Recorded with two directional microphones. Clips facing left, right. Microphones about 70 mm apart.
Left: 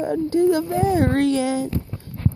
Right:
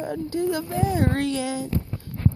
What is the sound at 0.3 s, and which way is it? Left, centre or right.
Speech, left.